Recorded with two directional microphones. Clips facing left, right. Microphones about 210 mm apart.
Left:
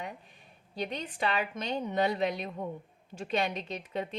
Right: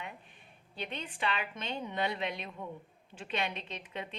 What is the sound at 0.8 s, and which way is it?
A woman's voice, 40° left (ahead or behind).